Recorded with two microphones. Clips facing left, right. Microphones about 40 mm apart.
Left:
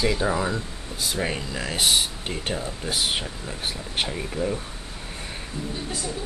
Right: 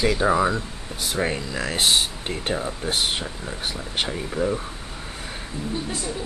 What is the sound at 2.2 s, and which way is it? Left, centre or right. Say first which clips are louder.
Speech: right 3 dB; centre.